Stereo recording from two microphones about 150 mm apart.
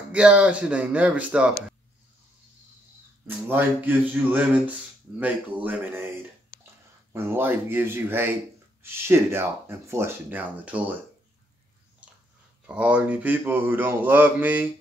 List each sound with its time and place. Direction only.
0.1 s speech: 10° right (ahead or behind)
3.3 s speech: 10° right (ahead or behind)
7.1 s speech: 15° right (ahead or behind)
12.6 s speech: 10° right (ahead or behind)